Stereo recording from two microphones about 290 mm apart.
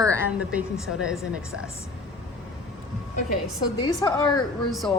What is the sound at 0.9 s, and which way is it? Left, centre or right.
Speech, left.